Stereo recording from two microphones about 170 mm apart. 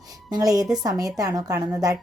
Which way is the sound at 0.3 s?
20° right (ahead or behind).